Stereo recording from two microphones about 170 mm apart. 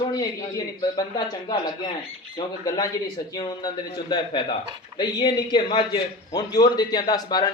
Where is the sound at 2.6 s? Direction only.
25° left (ahead or behind).